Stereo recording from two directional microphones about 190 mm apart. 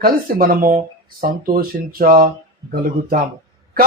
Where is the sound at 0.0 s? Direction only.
50° right (ahead or behind).